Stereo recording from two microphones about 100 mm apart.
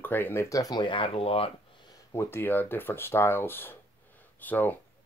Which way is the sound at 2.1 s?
25° left (ahead or behind).